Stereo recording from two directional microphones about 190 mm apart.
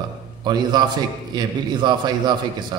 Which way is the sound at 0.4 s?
20° right (ahead or behind).